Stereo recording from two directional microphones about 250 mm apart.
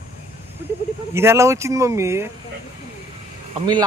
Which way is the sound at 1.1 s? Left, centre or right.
Centre.